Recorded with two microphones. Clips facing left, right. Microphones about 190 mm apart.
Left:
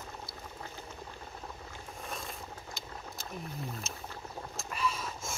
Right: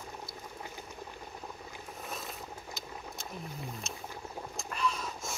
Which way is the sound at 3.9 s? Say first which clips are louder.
Right 1 dB; centre (ahead or behind).